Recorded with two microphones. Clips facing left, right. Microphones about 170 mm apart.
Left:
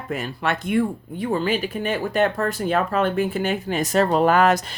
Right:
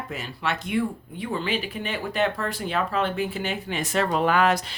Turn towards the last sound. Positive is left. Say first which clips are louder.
# left 4 dB
turn(degrees=45)  # may be behind; listen again after turning